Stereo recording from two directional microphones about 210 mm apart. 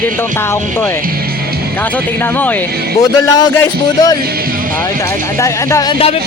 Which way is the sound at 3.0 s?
15° left (ahead or behind).